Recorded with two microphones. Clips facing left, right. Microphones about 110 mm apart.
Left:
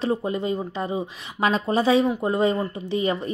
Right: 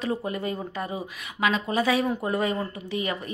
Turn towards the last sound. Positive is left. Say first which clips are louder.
# left 6 dB
turn(degrees=30)  # may be behind; listen again after turning